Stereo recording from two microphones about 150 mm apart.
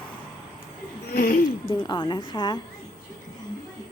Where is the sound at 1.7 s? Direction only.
30° left (ahead or behind).